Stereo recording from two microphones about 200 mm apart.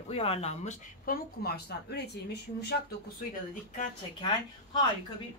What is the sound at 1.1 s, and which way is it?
Speech, 45° left (ahead or behind).